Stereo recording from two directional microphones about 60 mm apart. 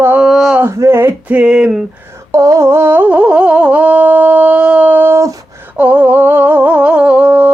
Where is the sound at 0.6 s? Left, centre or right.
Right.